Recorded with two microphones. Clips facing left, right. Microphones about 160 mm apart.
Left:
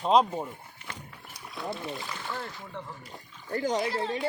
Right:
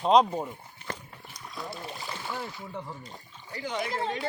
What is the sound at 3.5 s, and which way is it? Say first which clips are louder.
Speech: left 5 dB; 45° left (ahead or behind).